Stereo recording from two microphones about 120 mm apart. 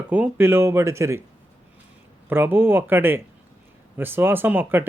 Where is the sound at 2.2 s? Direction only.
15° right (ahead or behind).